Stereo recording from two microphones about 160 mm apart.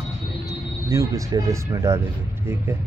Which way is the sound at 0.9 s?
20° right (ahead or behind).